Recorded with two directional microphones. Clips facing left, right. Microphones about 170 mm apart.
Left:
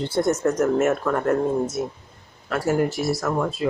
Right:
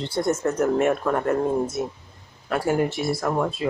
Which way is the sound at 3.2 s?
10° right (ahead or behind).